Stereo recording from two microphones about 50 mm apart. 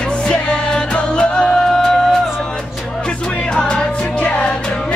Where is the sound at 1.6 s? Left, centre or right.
Centre.